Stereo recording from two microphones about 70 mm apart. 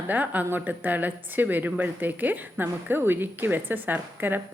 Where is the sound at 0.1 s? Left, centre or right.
Right.